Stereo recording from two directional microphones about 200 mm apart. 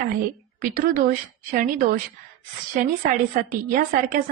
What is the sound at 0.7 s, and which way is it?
A woman's voice, 40° right (ahead or behind).